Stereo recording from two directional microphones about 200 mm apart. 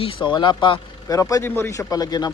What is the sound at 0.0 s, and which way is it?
Speech, 25° left (ahead or behind).